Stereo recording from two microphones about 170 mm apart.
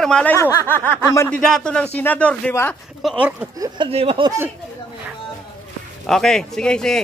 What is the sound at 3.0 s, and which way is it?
Speech, 5° right (ahead or behind).